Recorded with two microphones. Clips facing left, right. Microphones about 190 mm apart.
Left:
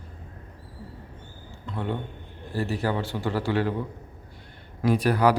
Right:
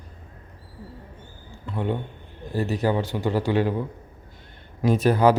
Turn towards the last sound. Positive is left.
turn(degrees=-25)  # may be behind; listen again after turning